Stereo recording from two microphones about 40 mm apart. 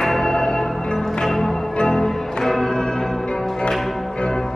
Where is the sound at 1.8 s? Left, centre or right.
Centre.